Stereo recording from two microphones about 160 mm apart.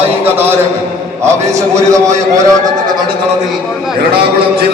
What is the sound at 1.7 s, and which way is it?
Speech, 20° right (ahead or behind).